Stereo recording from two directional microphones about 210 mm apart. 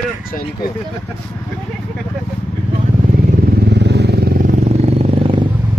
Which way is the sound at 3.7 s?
55° right (ahead or behind).